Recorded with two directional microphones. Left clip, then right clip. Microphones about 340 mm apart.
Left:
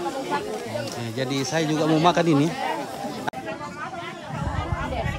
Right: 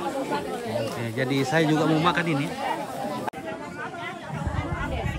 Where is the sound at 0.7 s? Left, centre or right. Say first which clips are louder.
Right 1 dB; centre.